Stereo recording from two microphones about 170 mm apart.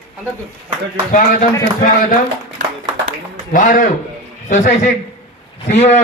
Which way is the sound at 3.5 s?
50° left (ahead or behind).